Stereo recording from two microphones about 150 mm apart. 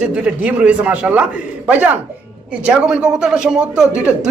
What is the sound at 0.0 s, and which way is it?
Speech, 5° right (ahead or behind).